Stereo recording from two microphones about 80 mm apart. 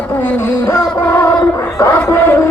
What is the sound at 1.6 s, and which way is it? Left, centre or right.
Battle cry, left.